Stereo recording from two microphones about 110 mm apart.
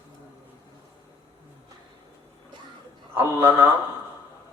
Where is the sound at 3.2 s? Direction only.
20° right (ahead or behind).